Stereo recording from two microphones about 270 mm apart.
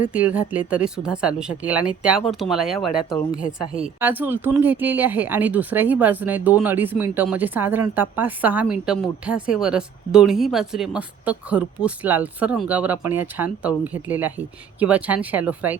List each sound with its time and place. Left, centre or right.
0.1 s a woman's voice: centre